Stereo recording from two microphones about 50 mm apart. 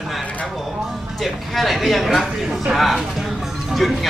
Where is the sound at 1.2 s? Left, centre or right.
Centre.